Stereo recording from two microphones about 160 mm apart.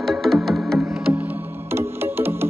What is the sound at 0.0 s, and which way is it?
Music, centre (ahead or behind).